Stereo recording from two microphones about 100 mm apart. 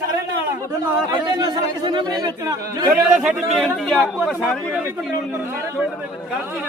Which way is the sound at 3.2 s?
Centre (ahead or behind).